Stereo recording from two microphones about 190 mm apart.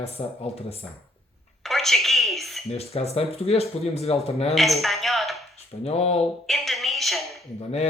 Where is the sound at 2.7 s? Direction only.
35° left (ahead or behind).